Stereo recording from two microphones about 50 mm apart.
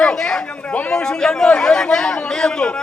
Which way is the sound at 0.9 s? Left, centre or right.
Centre.